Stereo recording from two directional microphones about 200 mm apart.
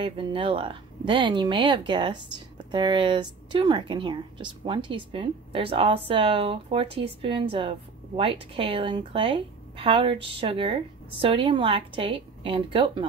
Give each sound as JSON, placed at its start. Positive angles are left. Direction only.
{"t": 0.0, "sound": "speech", "side_deg": -25}